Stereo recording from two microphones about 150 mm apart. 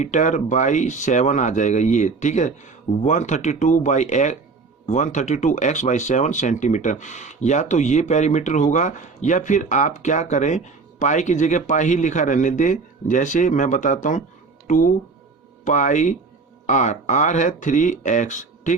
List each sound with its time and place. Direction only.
0.0 s a man's voice: 55° left (ahead or behind)